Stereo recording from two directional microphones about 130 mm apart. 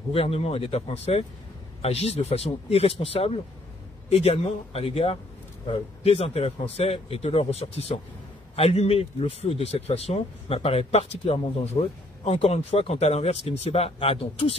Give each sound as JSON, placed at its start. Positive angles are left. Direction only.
{"t": 0.1, "sound": "speech", "side_deg": 50}